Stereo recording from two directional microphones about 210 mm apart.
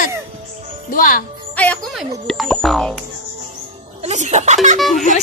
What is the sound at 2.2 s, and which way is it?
Speech, centre (ahead or behind).